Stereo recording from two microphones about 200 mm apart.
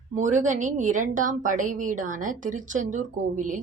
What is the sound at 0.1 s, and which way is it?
A woman's voice, 35° right (ahead or behind).